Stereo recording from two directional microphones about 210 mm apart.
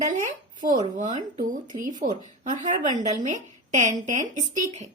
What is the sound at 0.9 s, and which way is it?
A woman's voice, 35° right (ahead or behind).